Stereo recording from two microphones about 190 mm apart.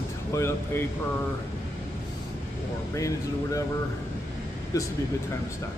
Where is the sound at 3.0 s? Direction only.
15° left (ahead or behind).